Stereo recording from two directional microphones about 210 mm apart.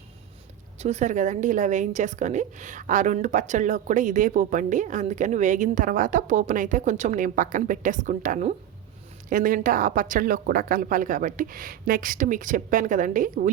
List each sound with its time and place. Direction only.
0.8 s a woman's voice: 35° right (ahead or behind)